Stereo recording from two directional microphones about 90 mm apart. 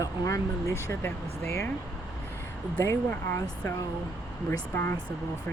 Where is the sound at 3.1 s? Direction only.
25° left (ahead or behind).